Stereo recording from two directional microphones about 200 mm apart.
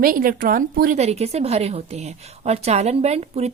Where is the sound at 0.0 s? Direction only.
45° right (ahead or behind).